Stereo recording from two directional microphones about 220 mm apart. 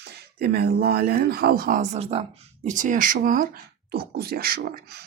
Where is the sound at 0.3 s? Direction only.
45° right (ahead or behind).